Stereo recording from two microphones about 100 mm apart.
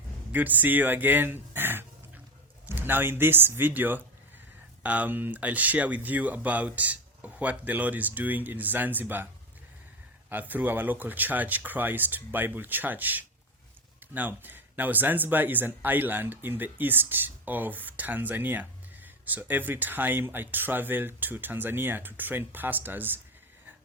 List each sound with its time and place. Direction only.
0.3 s speech: 15° right (ahead or behind)
10.2 s speech: 20° right (ahead or behind)